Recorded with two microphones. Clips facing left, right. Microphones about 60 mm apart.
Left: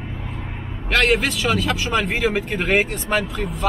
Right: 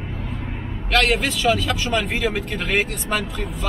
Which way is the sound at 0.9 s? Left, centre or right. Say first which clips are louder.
Left 1 dB; centre.